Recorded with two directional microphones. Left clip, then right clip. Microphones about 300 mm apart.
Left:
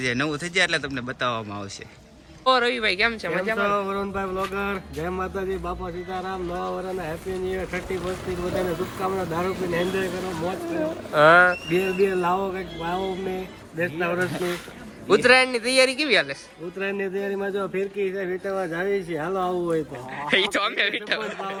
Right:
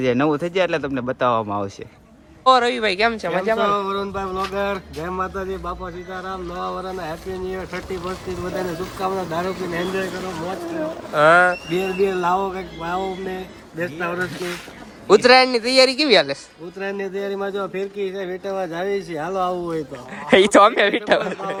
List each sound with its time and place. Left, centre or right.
0.0 s speech: centre
9.0 s speech: centre
10.8 s speech: centre
14.3 s speech: centre
15.0 s speech: centre